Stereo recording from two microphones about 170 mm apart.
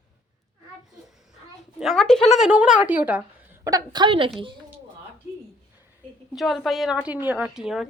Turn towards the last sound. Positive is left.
turn(degrees=-5)  # may be behind; listen again after turning